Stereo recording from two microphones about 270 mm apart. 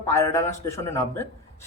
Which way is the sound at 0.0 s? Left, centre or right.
Centre.